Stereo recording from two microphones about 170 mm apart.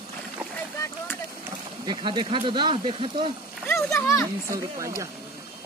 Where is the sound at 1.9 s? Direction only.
30° right (ahead or behind).